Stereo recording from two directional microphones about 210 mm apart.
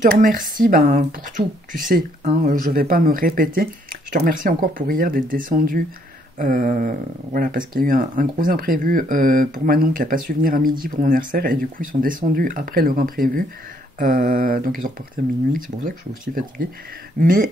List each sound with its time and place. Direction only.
0.0 s speech: 40° right (ahead or behind)